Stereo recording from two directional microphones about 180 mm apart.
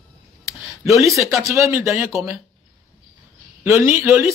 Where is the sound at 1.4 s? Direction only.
15° right (ahead or behind).